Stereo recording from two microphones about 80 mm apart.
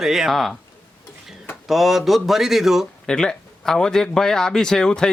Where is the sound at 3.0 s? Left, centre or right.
Centre.